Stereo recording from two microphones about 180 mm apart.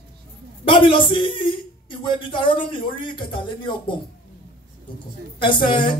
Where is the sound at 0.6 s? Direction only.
25° left (ahead or behind).